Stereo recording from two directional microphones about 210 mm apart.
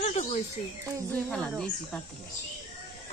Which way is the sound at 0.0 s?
30° left (ahead or behind).